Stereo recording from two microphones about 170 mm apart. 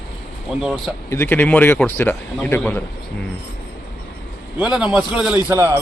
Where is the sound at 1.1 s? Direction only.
15° left (ahead or behind).